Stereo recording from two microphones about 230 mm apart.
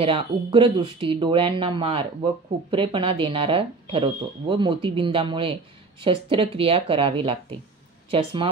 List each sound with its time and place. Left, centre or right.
0.0 s speech: right